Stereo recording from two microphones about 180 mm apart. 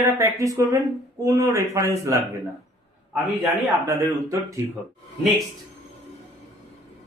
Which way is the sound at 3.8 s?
15° right (ahead or behind).